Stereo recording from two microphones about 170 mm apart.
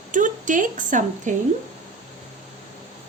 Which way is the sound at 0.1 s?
50° right (ahead or behind).